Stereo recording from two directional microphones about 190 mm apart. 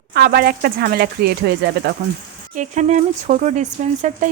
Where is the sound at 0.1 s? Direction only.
55° right (ahead or behind).